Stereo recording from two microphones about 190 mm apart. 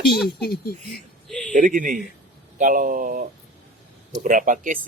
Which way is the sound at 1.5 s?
45° right (ahead or behind).